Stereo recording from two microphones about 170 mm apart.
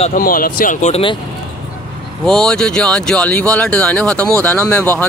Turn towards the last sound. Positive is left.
turn(degrees=10)  # may be behind; listen again after turning